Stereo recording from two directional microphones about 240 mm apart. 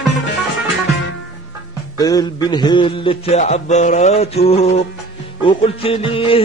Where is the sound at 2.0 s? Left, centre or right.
Centre.